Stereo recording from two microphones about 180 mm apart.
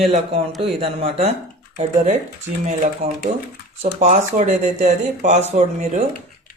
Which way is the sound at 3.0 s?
40° right (ahead or behind).